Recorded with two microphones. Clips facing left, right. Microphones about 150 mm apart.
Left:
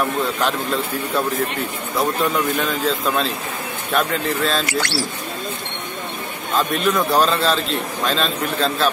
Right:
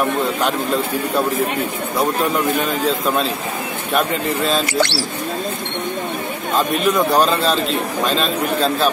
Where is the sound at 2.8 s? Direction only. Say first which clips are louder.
Right 2 dB; centre (ahead or behind).